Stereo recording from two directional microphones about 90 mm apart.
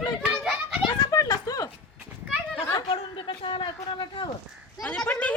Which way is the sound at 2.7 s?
55° left (ahead or behind).